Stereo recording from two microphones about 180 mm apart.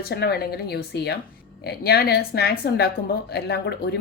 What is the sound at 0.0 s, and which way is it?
Speech, 60° left (ahead or behind).